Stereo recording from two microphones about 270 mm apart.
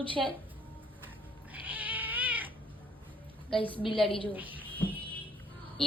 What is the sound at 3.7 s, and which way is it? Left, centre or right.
Speech, centre.